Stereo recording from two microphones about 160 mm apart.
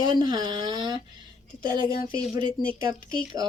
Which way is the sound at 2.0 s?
25° right (ahead or behind).